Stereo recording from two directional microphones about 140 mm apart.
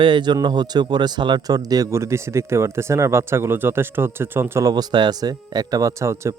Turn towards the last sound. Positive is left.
turn(degrees=-20)  # may be behind; listen again after turning